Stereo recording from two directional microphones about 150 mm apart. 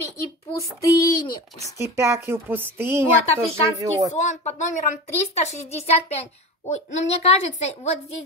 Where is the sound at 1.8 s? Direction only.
15° right (ahead or behind).